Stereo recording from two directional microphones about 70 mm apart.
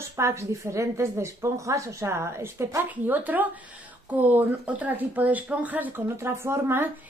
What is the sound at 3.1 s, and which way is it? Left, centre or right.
Speech, right.